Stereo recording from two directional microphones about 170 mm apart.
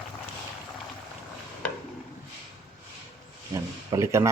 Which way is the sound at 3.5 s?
20° right (ahead or behind).